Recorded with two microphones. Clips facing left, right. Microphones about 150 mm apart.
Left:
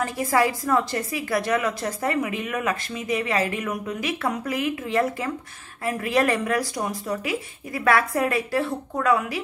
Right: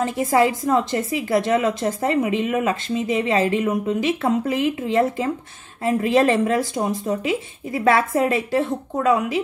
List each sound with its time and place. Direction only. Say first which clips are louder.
0.0 s a woman's voice: right 4 dB; 25° right (ahead or behind)